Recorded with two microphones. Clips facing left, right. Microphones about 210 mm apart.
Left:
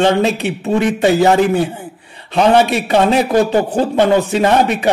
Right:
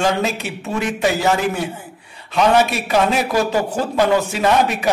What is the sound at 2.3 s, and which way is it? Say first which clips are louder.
Speech: left 4 dB; 30° left (ahead or behind).